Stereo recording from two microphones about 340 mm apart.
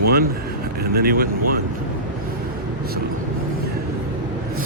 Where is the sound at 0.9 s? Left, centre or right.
Right.